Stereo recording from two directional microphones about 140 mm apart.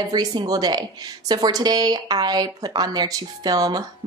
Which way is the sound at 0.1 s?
30° right (ahead or behind).